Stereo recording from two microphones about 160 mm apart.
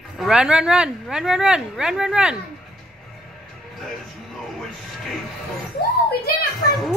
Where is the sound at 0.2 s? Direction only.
5° right (ahead or behind).